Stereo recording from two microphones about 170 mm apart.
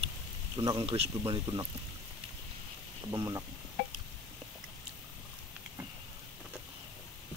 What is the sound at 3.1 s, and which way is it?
Speech, 20° right (ahead or behind).